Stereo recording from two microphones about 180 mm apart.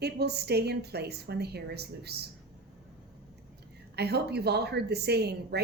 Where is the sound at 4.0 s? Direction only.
65° right (ahead or behind).